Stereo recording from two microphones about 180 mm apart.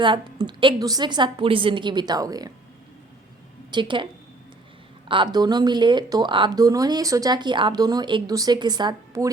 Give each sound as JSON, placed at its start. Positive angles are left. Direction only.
{"t": 0.0, "sound": "a woman's voice", "side_deg": -25}
{"t": 3.7, "sound": "a woman's voice", "side_deg": -25}